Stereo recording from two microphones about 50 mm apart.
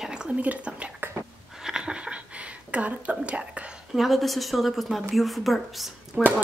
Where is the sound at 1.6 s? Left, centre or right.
Centre.